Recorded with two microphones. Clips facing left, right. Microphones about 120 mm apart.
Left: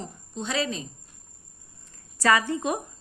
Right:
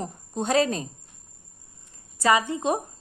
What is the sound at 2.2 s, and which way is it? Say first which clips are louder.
Speech: right 1 dB; 20° right (ahead or behind).